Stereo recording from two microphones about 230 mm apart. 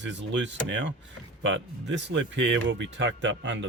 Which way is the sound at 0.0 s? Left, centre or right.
Right.